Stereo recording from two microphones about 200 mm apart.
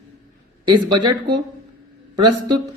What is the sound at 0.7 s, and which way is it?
Speech, 20° right (ahead or behind).